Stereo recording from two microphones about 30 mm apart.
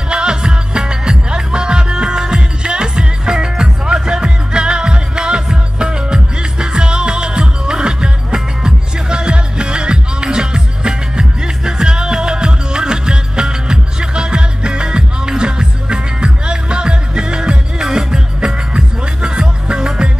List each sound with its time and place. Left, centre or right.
0.1 s music: right